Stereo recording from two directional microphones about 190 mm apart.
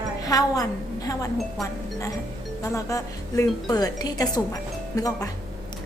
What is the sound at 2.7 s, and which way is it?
A woman's voice, 15° left (ahead or behind).